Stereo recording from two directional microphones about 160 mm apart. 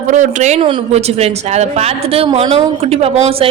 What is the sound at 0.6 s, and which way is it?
A woman's voice, 30° right (ahead or behind).